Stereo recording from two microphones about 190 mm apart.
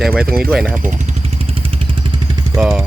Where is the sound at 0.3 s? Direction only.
55° right (ahead or behind).